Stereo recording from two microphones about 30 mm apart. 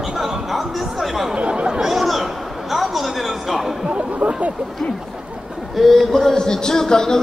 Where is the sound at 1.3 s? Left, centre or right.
Right.